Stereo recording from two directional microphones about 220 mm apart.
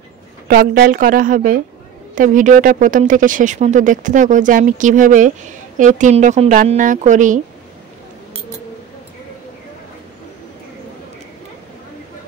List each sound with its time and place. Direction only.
0.5 s speech: 45° right (ahead or behind)